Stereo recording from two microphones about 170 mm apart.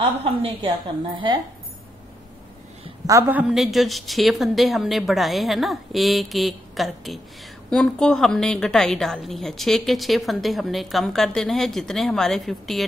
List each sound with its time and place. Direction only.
0.2 s a woman's voice: 30° right (ahead or behind)
3.1 s a woman's voice: 15° right (ahead or behind)